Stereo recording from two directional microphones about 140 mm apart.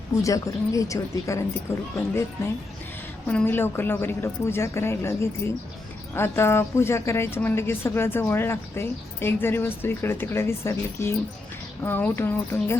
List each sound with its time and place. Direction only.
0.2 s speech: 25° left (ahead or behind)
3.2 s speech: 15° left (ahead or behind)